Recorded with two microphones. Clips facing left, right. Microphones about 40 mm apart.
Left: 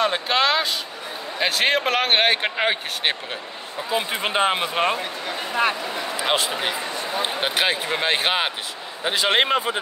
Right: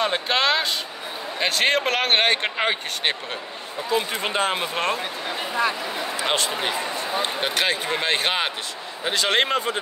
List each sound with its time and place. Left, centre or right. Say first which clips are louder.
0.0 s speech: left 1 dB; centre
5.9 s speech: left 1 dB; centre
6.8 s speech: right 1 dB; centre
7.2 s speech: left 2 dB; centre